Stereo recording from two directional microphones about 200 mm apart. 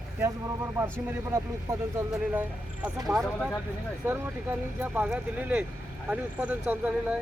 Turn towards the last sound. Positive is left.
turn(degrees=-10)  # may be behind; listen again after turning